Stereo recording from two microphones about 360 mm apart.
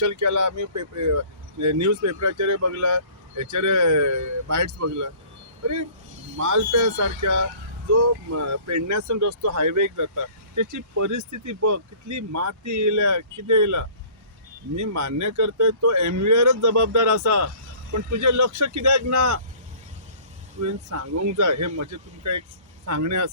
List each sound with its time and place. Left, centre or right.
0.0 s speech: right
6.3 s speech: right
20.6 s speech: right